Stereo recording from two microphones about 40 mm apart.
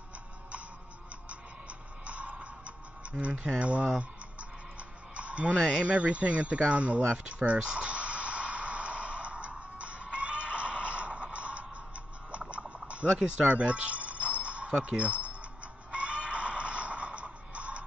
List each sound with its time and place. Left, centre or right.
2.0 s music: right
5.1 s a sound: right
5.8 s speech: right
7.5 s speech: centre
7.8 s music: right
10.1 s neigh: right
11.3 s music: right
13.1 s speech: centre
13.5 s music: right
14.7 s speech: centre
15.0 s speech: right
15.9 s music: right